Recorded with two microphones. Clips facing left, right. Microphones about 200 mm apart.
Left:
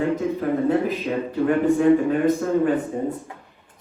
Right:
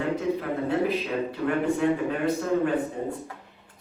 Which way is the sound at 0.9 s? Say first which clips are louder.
Left 2 dB; 45° left (ahead or behind).